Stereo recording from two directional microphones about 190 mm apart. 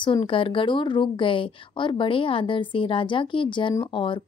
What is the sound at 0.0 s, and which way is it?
A woman's voice, 25° left (ahead or behind).